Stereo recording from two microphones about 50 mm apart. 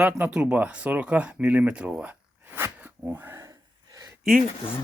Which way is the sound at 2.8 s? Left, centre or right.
Right.